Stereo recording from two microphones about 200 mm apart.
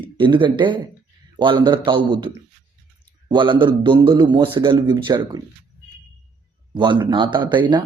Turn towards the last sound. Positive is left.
turn(degrees=-20)  # may be behind; listen again after turning